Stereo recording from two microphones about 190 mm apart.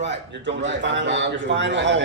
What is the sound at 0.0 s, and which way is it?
A man's voice, 65° right (ahead or behind).